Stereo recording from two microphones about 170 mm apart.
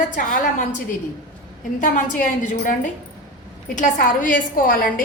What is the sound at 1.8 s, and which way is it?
A woman's voice, 50° left (ahead or behind).